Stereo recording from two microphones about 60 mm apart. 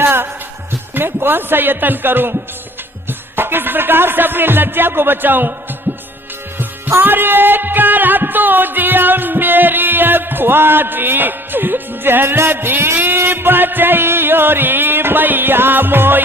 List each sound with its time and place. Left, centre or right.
0.0 s music: right